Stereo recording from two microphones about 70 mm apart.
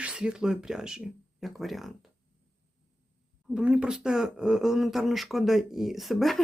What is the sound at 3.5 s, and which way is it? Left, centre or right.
Speech, centre.